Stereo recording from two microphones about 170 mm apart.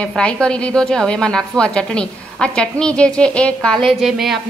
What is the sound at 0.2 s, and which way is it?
A woman's voice, 5° left (ahead or behind).